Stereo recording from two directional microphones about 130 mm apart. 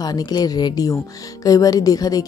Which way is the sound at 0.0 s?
30° left (ahead or behind).